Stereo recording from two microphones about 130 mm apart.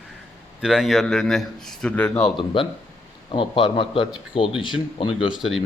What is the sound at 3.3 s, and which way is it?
A man's voice, 40° left (ahead or behind).